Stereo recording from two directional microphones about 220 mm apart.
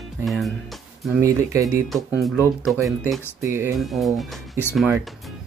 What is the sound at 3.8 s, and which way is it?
Speech, centre (ahead or behind).